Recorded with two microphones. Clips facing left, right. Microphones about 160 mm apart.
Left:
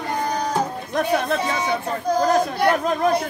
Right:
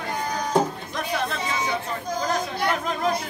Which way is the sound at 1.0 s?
55° left (ahead or behind).